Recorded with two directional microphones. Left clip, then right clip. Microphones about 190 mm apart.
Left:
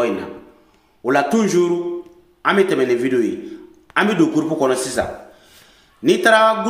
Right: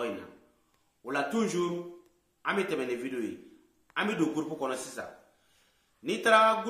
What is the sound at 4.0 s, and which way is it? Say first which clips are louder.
Speech: left 14 dB; 10° left (ahead or behind).